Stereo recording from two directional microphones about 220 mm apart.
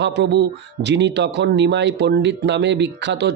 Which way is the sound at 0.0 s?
50° right (ahead or behind).